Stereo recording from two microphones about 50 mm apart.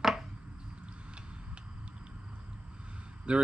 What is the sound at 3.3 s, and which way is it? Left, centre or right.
Speech, right.